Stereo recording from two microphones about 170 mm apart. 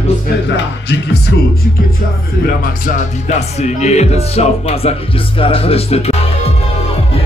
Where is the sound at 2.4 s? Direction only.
55° left (ahead or behind); by 6.5 s 35° left (ahead or behind).